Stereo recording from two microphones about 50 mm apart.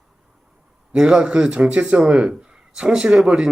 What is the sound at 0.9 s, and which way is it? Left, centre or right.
A man's voice, centre.